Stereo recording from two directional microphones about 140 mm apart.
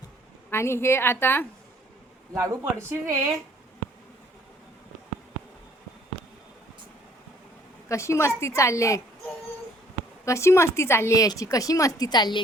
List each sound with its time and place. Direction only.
0.5 s a woman's voice: 20° left (ahead or behind)
2.3 s speech: 20° right (ahead or behind)
7.9 s a woman's voice: 20° left (ahead or behind)
10.2 s a woman's voice: 20° left (ahead or behind)